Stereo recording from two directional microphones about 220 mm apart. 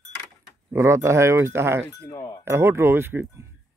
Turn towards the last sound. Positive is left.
turn(degrees=-10)  # may be behind; listen again after turning